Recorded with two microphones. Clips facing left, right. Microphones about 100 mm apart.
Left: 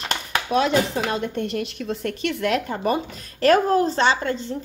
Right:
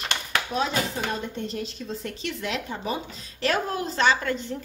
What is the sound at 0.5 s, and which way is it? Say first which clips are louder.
A woman's voice: left 9 dB; 70° left (ahead or behind).